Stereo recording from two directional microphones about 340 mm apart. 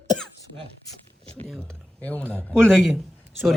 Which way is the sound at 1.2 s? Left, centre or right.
Centre.